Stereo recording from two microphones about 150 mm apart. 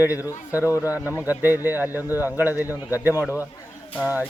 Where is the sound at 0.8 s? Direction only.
10° right (ahead or behind).